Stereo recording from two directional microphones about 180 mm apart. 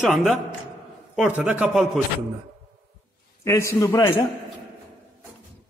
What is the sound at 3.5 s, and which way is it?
Speech, 15° left (ahead or behind).